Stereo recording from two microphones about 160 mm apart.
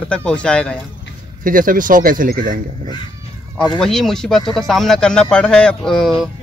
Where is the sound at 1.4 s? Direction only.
60° right (ahead or behind).